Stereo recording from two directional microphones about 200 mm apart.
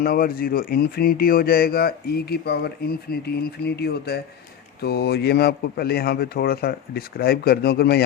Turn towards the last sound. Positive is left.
turn(degrees=50)  # may be behind; listen again after turning